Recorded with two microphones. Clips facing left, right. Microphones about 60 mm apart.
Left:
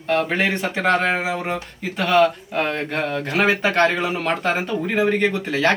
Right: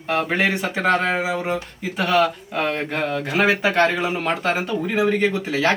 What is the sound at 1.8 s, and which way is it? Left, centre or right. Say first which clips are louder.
Speech: left 3 dB; centre.